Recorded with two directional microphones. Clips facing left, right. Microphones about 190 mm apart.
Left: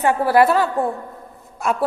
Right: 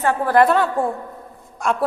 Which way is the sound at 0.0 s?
10° left (ahead or behind).